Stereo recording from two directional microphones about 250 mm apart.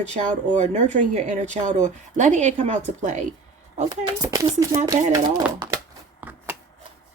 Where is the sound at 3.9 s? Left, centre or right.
Centre.